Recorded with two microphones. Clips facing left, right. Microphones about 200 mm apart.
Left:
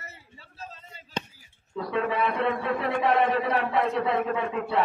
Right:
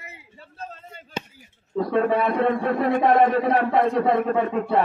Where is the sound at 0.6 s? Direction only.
55° right (ahead or behind).